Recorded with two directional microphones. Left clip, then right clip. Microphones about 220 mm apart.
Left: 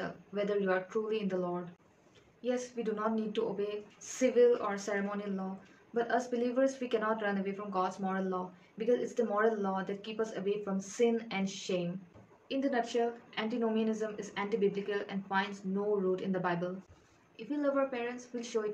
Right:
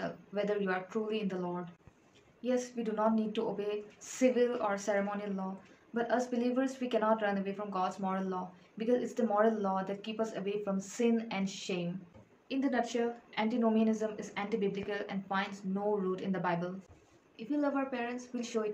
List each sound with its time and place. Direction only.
0.3 s a woman's voice: centre (ahead or behind)